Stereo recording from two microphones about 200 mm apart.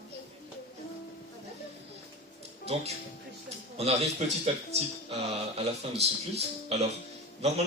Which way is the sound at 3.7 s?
30° right (ahead or behind).